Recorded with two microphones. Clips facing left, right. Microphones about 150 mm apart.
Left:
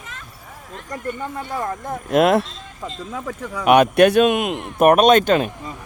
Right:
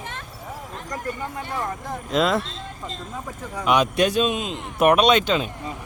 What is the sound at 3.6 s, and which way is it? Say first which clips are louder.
Speech: left 7 dB; 60° left (ahead or behind).